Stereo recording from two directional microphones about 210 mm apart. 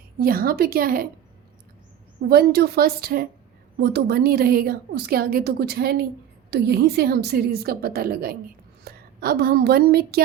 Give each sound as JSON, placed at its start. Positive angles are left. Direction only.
{"t": 0.2, "sound": "a woman's voice", "side_deg": -45}
{"t": 2.3, "sound": "a woman's voice", "side_deg": -50}